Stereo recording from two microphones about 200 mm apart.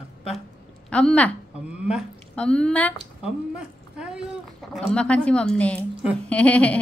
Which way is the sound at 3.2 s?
5° right (ahead or behind).